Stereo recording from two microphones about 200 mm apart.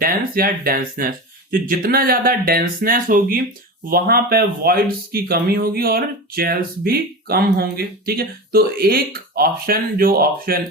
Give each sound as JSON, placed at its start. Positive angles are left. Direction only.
{"t": 0.0, "sound": "speech", "side_deg": -45}